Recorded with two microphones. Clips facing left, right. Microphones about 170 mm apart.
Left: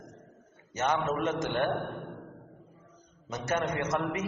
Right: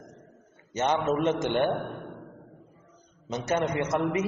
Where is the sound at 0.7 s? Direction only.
25° right (ahead or behind).